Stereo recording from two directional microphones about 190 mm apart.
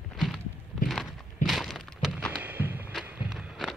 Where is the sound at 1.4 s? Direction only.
Centre (ahead or behind).